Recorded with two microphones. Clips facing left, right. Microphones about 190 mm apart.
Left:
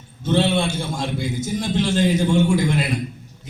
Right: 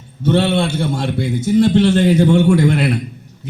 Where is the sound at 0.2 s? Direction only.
60° right (ahead or behind).